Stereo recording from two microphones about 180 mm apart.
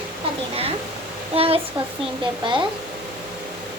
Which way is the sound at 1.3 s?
30° right (ahead or behind).